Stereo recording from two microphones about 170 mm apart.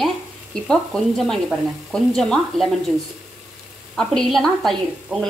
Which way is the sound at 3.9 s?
Centre (ahead or behind).